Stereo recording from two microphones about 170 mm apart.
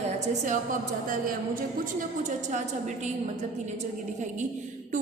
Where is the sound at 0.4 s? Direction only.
50° right (ahead or behind).